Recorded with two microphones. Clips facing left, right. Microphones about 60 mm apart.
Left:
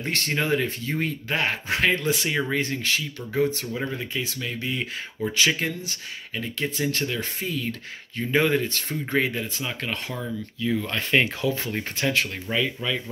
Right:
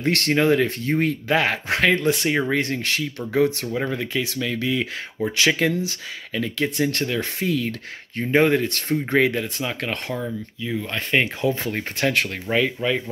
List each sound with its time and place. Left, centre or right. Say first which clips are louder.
0.0 s speech: right 7 dB; right
1.0 s speech: right 5 dB; right
1.7 s speech: right 3 dB; right
2.0 s speech: right 4 dB; right
3.9 s speech: right 5 dB; right
5.3 s speech: right 5 dB; right
8.2 s speech: right 4 dB; right
10.2 s speech: left 1 dB; centre
10.9 s speech: right 3 dB; right
11.4 s speech: right 3 dB; right